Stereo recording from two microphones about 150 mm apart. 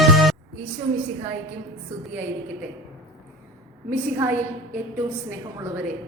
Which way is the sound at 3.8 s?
15° right (ahead or behind).